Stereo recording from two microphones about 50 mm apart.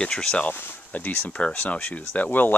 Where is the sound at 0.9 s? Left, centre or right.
Left.